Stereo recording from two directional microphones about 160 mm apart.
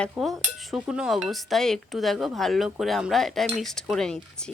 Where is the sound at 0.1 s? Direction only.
Centre (ahead or behind).